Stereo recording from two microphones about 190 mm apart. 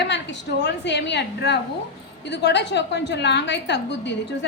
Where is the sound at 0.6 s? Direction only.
65° left (ahead or behind).